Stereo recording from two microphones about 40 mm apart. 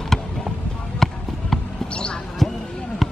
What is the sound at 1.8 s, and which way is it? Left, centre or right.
Basketball bounce, left.